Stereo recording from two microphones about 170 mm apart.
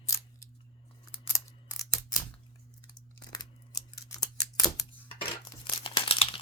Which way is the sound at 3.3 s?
20° left (ahead or behind).